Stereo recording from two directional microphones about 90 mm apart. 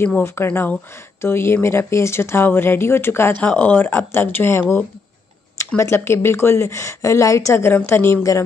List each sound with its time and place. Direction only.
0.0 s a woman's voice: 25° left (ahead or behind)